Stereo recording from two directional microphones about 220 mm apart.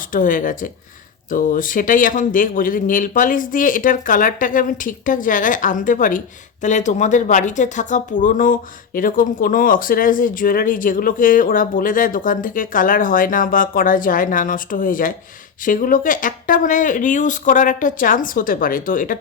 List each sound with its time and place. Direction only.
0.1 s speech: 40° left (ahead or behind)